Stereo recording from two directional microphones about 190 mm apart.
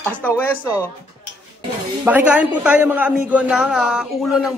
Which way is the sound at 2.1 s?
5° right (ahead or behind).